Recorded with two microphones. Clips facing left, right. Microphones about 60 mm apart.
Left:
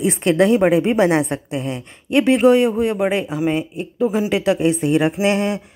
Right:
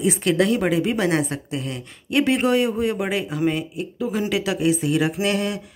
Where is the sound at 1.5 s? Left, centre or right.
Centre.